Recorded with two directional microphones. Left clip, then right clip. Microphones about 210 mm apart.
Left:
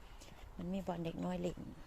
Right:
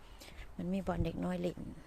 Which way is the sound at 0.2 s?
25° right (ahead or behind).